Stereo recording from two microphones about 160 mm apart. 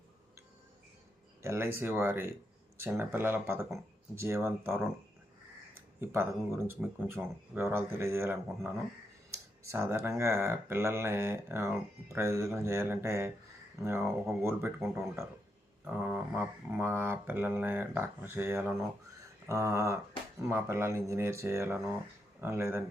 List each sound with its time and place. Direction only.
1.4 s speech: 15° right (ahead or behind)
6.0 s speech: 15° right (ahead or behind)